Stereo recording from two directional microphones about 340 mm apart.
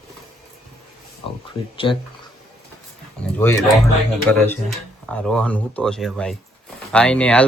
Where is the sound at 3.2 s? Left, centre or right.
Centre.